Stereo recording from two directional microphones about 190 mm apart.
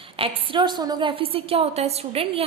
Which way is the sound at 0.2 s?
25° right (ahead or behind).